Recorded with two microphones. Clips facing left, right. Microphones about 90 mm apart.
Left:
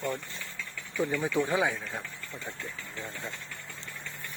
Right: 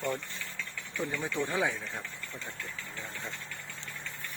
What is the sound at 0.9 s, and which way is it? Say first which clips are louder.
Speech: left 5 dB; 5° left (ahead or behind).